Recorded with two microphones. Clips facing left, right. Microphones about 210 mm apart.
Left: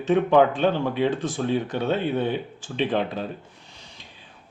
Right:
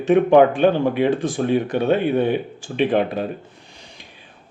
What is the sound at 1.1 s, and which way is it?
Speech, 15° right (ahead or behind).